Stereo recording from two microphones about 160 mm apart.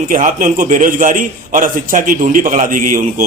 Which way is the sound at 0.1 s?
55° right (ahead or behind).